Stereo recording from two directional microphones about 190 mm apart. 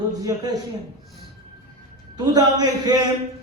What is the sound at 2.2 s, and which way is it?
Speech, 20° right (ahead or behind).